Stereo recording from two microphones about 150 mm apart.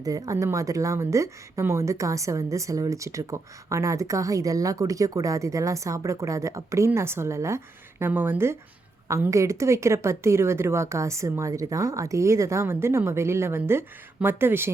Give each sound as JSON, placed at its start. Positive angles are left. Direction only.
{"t": 0.0, "sound": "speech", "side_deg": -25}